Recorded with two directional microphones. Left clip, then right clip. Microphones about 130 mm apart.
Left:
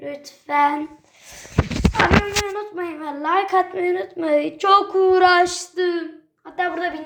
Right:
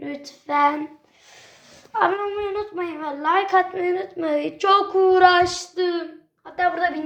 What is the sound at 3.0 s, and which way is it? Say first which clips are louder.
A woman's voice: even; 35° left (ahead or behind).